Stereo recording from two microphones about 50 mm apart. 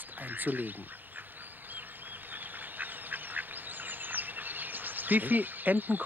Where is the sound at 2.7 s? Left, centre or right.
Right.